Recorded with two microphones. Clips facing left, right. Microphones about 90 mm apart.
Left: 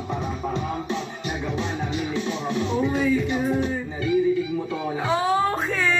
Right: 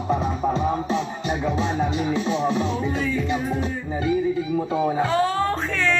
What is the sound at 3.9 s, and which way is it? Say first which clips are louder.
Music: even; 35° right (ahead or behind).